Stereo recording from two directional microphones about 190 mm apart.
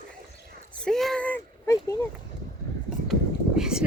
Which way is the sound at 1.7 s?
15° left (ahead or behind).